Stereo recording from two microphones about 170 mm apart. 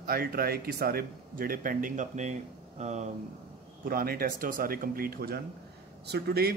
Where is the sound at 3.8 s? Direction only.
60° right (ahead or behind).